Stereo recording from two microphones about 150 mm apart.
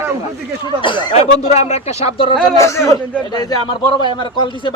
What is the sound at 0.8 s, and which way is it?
Speech, 30° left (ahead or behind).